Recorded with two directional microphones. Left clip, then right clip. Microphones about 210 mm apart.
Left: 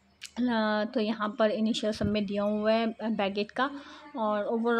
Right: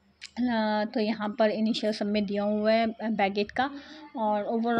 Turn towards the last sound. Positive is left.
turn(degrees=0)  # may be behind; listen again after turning